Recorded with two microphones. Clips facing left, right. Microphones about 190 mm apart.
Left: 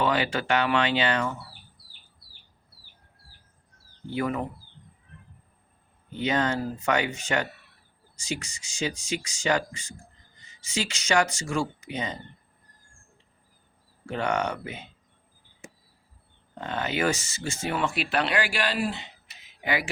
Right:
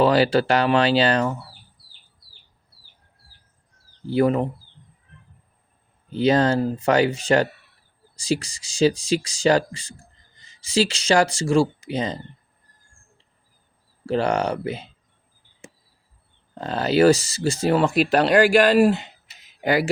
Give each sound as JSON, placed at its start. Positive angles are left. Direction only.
{"t": 0.0, "sound": "speech", "side_deg": -35}
{"t": 4.0, "sound": "speech", "side_deg": -35}
{"t": 6.1, "sound": "speech", "side_deg": -35}
{"t": 14.1, "sound": "speech", "side_deg": -35}
{"t": 16.6, "sound": "speech", "side_deg": -35}
{"t": 19.6, "sound": "speech", "side_deg": -40}